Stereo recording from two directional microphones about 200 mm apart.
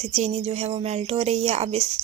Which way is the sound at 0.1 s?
30° right (ahead or behind).